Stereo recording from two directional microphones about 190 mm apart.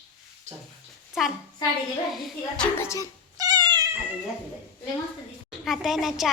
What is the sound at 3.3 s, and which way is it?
Cat, 20° right (ahead or behind).